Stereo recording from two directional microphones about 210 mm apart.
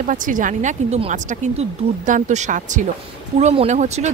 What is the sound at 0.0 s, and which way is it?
Speech, 40° right (ahead or behind).